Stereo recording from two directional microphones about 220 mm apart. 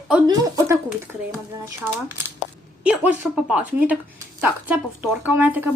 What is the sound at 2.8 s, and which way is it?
Speech, 5° right (ahead or behind).